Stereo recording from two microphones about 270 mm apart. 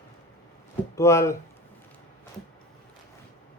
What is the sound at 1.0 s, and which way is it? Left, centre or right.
Speech, centre.